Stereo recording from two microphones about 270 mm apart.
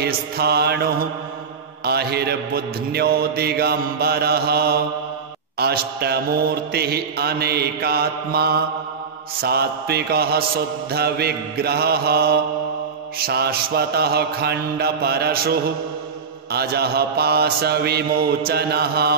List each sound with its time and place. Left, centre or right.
0.0 s mantra: right